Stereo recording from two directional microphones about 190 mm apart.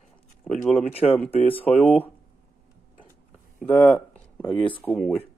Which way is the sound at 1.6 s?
5° left (ahead or behind).